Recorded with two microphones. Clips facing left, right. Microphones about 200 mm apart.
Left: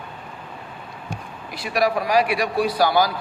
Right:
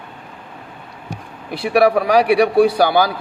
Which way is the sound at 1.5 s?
60° right (ahead or behind).